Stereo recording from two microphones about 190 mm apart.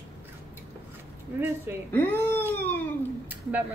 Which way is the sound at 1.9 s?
10° left (ahead or behind).